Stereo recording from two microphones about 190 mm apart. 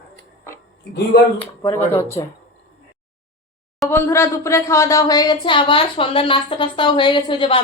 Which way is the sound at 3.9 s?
15° left (ahead or behind).